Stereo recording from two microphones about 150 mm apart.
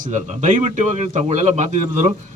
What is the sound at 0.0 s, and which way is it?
A man's voice, 55° right (ahead or behind).